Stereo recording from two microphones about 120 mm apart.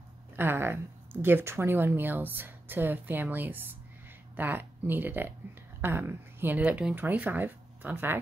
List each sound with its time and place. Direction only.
0.4 s a woman's voice: 20° right (ahead or behind)